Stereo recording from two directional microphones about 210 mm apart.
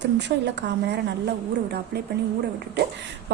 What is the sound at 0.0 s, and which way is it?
Speech, 55° right (ahead or behind).